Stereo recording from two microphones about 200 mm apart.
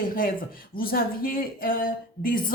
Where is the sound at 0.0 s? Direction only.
45° left (ahead or behind).